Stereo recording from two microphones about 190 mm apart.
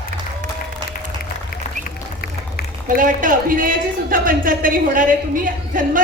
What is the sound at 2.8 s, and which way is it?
A man's voice, 45° right (ahead or behind).